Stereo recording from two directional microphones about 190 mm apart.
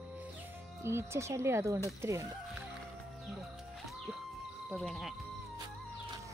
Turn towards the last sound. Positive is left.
turn(degrees=0)  # may be behind; listen again after turning